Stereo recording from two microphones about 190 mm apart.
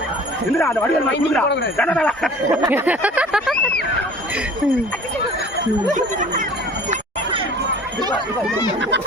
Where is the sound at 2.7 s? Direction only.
10° right (ahead or behind).